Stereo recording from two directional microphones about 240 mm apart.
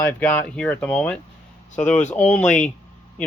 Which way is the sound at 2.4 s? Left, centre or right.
Left.